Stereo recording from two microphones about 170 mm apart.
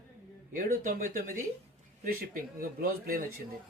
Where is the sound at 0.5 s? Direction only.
55° right (ahead or behind).